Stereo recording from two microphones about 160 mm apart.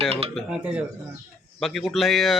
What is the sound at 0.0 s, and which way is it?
Dishes, 40° right (ahead or behind).